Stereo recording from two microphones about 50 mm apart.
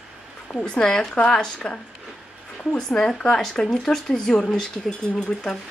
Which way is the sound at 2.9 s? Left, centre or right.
Centre.